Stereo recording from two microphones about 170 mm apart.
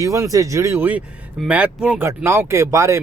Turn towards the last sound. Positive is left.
turn(degrees=-15)  # may be behind; listen again after turning